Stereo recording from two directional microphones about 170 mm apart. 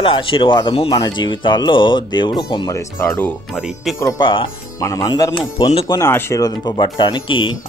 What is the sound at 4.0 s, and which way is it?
Speech, 25° left (ahead or behind).